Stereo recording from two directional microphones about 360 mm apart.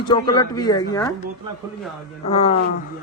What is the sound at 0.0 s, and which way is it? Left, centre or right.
Speech, centre.